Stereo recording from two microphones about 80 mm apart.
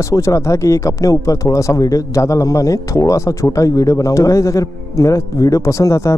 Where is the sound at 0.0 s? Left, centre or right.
Left.